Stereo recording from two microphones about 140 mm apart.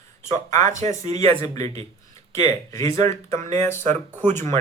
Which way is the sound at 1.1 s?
50° right (ahead or behind).